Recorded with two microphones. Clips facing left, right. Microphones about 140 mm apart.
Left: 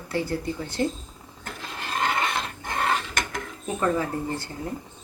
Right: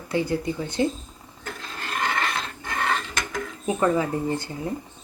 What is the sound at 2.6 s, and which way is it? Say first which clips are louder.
Dishes: even; 20° left (ahead or behind).